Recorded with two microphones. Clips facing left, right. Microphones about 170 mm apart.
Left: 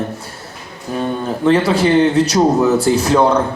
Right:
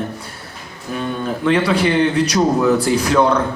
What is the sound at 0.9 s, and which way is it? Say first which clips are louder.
A woman's voice: left 3 dB; 35° left (ahead or behind).